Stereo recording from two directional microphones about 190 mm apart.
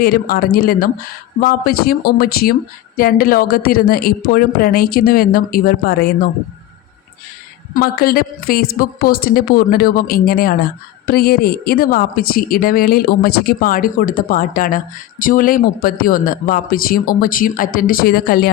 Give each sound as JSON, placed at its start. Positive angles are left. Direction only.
{"t": 0.0, "sound": "a woman's voice", "side_deg": 50}
{"t": 7.7, "sound": "a woman's voice", "side_deg": 55}